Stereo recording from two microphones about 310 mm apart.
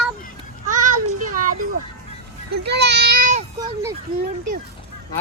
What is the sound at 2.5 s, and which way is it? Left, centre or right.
Children playing, right.